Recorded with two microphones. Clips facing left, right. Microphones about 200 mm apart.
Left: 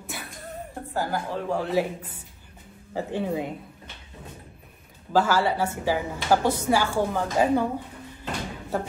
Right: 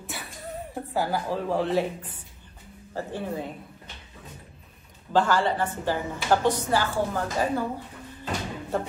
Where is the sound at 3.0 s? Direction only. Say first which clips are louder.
Left 4 dB; 15° left (ahead or behind).